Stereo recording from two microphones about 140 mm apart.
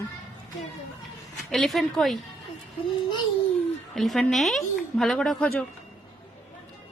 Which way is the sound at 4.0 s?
Centre (ahead or behind).